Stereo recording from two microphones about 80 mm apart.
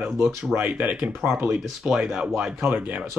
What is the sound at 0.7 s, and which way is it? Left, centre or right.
Speech, right.